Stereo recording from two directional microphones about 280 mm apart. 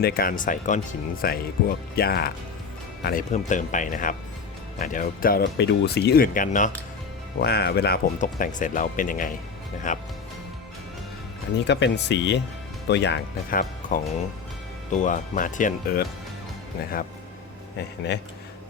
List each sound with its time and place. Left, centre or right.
0.0 s speech: left
11.6 s speech: left
17.7 s speech: left